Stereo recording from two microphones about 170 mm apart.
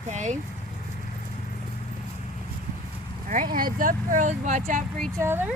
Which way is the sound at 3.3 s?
55° right (ahead or behind).